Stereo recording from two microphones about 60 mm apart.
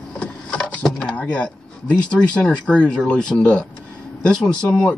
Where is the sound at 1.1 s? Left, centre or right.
Left.